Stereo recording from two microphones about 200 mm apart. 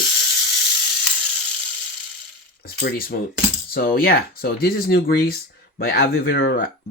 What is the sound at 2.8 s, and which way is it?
Speech, 55° left (ahead or behind).